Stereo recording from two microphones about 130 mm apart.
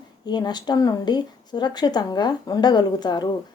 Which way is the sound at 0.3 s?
35° left (ahead or behind).